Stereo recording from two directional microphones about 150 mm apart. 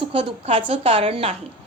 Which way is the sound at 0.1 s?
40° right (ahead or behind).